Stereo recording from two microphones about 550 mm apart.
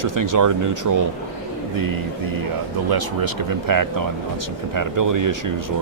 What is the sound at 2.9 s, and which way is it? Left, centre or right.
Speech, right.